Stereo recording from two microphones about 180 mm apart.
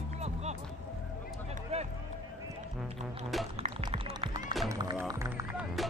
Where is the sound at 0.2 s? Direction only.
35° right (ahead or behind).